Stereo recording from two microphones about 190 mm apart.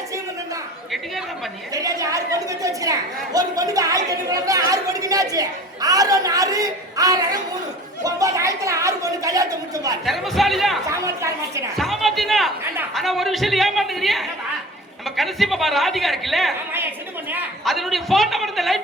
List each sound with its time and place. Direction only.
1.7 s speech: 20° right (ahead or behind)
10.1 s a woman's voice: centre (ahead or behind)
10.8 s speech: 15° right (ahead or behind)
11.8 s a woman's voice: centre (ahead or behind)
17.7 s a woman's voice: centre (ahead or behind)